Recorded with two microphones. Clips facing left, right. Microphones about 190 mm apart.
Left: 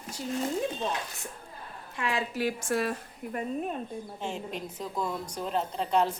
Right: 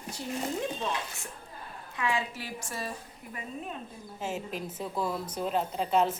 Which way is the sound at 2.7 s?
65° left (ahead or behind).